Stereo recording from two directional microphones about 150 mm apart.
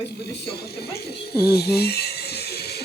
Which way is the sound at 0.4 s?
90° left.